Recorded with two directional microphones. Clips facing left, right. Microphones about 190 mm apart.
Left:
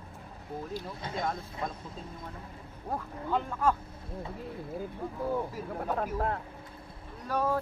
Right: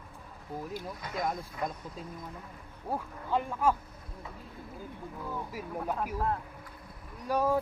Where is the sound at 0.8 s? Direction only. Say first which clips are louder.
Right 1 dB; 25° left (ahead or behind).